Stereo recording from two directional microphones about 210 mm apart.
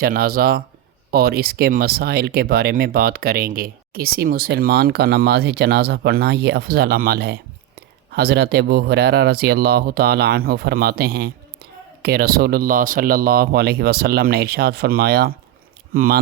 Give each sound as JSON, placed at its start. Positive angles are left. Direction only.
{"t": 0.0, "sound": "speech", "side_deg": -45}